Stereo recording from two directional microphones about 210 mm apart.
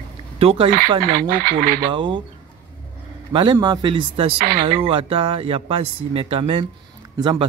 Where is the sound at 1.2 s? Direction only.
45° right (ahead or behind).